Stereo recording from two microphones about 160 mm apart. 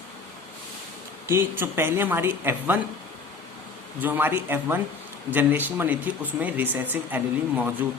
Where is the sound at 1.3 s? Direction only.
15° right (ahead or behind).